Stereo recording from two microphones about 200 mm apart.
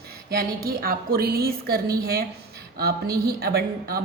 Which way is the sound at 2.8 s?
50° right (ahead or behind).